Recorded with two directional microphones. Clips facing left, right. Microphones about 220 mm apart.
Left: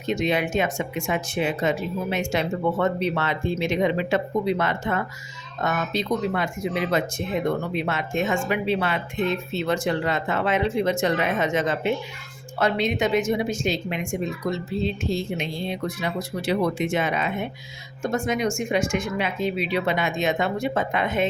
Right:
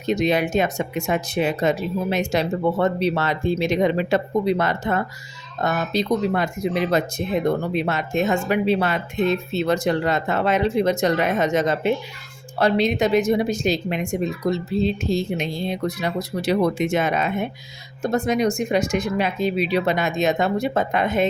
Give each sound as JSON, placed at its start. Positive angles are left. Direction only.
{"t": 0.0, "sound": "speech", "side_deg": -40}